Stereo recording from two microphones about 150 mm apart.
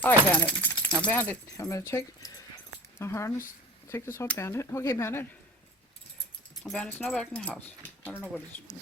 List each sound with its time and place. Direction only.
0.0 s speech: 10° left (ahead or behind)
1.5 s speech: 20° left (ahead or behind)
6.6 s speech: 5° left (ahead or behind)